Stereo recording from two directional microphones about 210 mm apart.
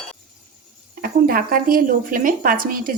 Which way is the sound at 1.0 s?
45° right (ahead or behind).